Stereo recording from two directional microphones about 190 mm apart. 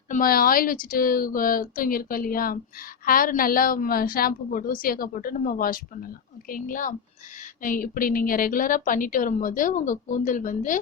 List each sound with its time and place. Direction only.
0.1 s a woman's voice: 50° left (ahead or behind)